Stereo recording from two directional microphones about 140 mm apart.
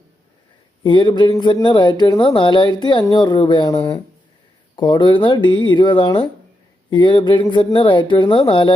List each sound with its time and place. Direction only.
0.9 s speech: 35° left (ahead or behind)